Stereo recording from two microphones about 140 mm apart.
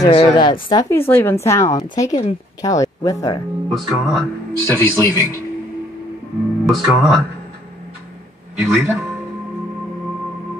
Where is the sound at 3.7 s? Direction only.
Centre (ahead or behind).